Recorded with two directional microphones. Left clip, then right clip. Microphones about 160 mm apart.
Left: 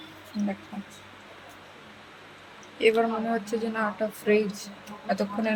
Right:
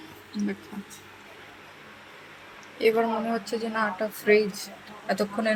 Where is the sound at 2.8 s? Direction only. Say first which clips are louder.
Even; 5° left (ahead or behind).